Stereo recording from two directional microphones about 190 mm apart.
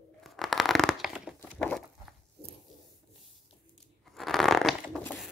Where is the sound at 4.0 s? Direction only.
Centre (ahead or behind).